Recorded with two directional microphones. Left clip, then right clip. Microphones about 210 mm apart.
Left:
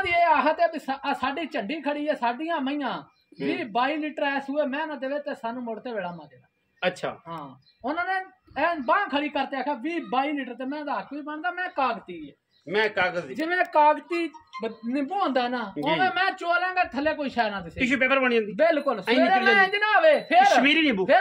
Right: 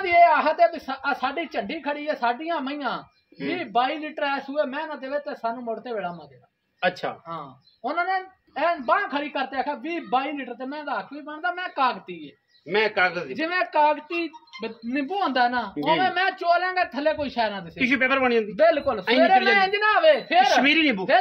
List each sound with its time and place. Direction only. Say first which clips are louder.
0.0 s speech: right 4 dB; centre (ahead or behind)
6.8 s a man's voice: right 2 dB; 10° left (ahead or behind)
7.2 s speech: right 2 dB; centre (ahead or behind); by 14.7 s 30° right (ahead or behind)
14.9 s speech: right 1 dB; 10° right (ahead or behind)
15.7 s speech: right 2 dB; centre (ahead or behind)
17.7 s speech: right 1 dB; centre (ahead or behind)
18.6 s speech: right 4 dB; 10° right (ahead or behind)
20.4 s speech: even; 5° left (ahead or behind)